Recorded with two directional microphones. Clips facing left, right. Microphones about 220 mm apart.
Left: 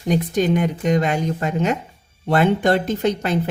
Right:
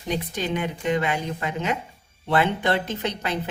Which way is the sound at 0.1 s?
45° left (ahead or behind).